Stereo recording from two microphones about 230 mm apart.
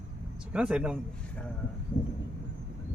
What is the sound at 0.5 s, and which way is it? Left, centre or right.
Speech, centre.